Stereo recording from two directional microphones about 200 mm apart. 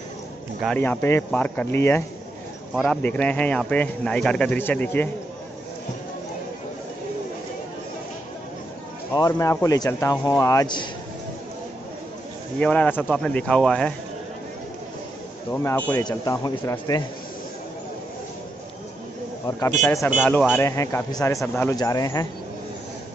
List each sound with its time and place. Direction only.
0.6 s speech: 5° left (ahead or behind)
9.1 s speech: 15° left (ahead or behind)
12.5 s speech: 5° left (ahead or behind)
15.5 s speech: 10° left (ahead or behind)
16.0 s speech: 20° left (ahead or behind)
20.1 s speech: 10° left (ahead or behind)